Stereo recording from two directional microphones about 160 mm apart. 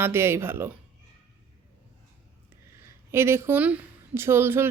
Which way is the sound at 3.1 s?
15° right (ahead or behind).